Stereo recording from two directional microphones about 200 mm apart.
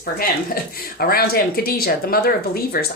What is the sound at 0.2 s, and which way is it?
Speech, 50° left (ahead or behind).